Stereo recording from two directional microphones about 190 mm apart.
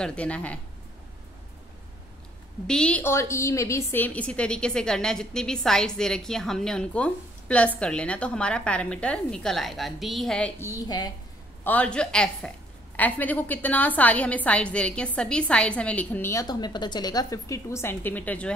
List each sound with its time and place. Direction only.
0.0 s a woman's voice: 5° left (ahead or behind)
2.6 s a woman's voice: 5° left (ahead or behind)
10.7 s speech: 20° left (ahead or behind)
11.6 s a woman's voice: 5° left (ahead or behind)